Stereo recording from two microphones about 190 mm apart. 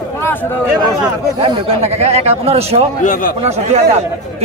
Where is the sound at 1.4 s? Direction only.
30° right (ahead or behind).